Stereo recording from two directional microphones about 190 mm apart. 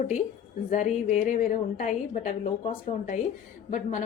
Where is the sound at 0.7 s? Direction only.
40° left (ahead or behind).